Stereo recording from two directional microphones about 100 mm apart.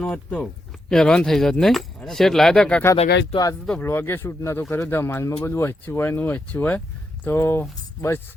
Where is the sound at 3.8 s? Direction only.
20° left (ahead or behind).